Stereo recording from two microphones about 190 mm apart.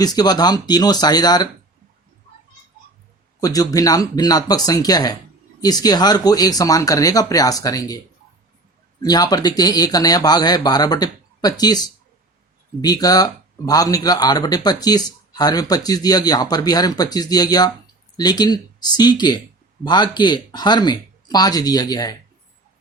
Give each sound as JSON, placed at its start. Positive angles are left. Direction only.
{"t": 0.0, "sound": "speech", "side_deg": 20}
{"t": 3.4, "sound": "speech", "side_deg": 20}
{"t": 12.8, "sound": "speech", "side_deg": 20}